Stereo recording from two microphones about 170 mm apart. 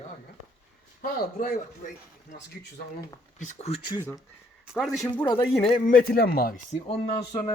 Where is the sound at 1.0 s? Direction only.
60° left (ahead or behind).